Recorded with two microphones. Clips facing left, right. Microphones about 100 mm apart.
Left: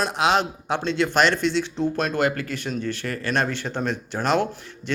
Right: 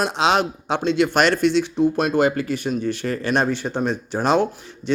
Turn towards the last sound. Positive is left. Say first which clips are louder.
# right 3 dB
turn(degrees=-15)  # may be behind; listen again after turning